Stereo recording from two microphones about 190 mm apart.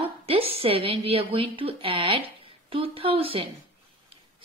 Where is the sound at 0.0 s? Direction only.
30° right (ahead or behind).